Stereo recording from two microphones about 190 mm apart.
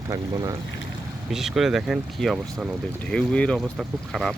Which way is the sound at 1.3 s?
Centre (ahead or behind).